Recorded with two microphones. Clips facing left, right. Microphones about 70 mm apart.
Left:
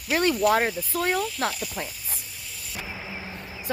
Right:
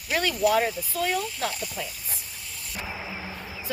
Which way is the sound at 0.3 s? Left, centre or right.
Left.